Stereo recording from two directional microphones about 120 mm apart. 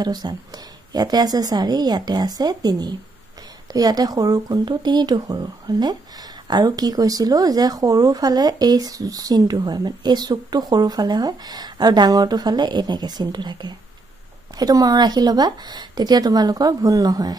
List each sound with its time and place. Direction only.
0.0 s speech: 35° right (ahead or behind)